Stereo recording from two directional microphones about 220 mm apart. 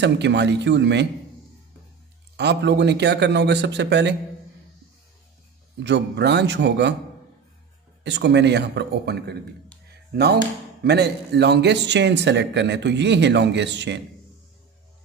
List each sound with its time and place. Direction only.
0.0 s speech: 50° right (ahead or behind)
2.3 s speech: 50° right (ahead or behind)
5.9 s speech: 50° right (ahead or behind)
8.0 s speech: 50° right (ahead or behind)